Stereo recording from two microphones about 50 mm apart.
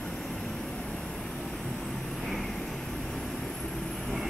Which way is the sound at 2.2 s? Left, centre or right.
Centre.